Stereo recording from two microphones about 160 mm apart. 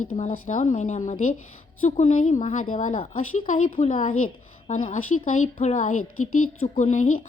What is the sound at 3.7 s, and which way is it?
Speech, 40° left (ahead or behind).